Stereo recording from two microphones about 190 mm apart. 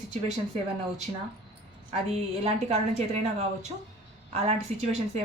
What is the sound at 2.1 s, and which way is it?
A woman's voice, 35° right (ahead or behind).